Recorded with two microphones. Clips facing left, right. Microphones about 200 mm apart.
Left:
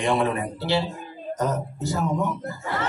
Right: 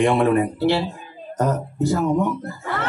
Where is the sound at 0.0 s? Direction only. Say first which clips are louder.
Right 6 dB; 60° right (ahead or behind).